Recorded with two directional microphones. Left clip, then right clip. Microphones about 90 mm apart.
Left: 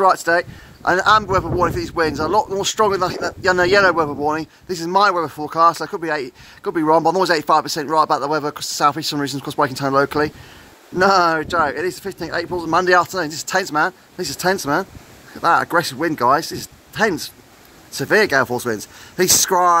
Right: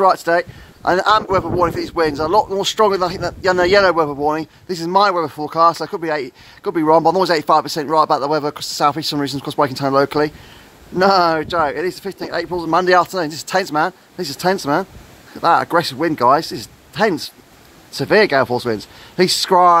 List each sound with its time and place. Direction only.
0.0 s speech: 15° right (ahead or behind)